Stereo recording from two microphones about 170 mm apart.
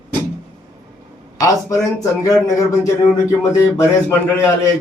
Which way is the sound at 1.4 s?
20° left (ahead or behind).